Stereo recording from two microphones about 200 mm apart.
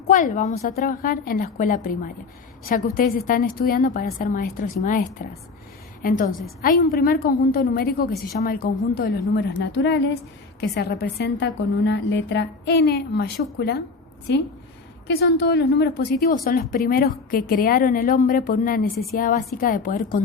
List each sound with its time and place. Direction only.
0.1 s a woman's voice: 40° left (ahead or behind)